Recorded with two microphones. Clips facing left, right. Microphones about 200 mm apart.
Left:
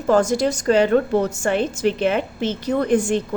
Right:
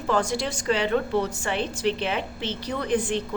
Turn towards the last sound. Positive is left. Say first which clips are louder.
# left 7 dB
turn(degrees=45)  # may be behind; listen again after turning